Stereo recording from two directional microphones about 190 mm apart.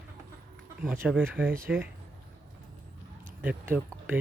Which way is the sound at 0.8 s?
5° right (ahead or behind).